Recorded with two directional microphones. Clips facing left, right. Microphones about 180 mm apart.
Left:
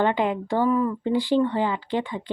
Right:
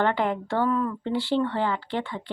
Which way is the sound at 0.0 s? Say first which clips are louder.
Left 2 dB; 15° left (ahead or behind).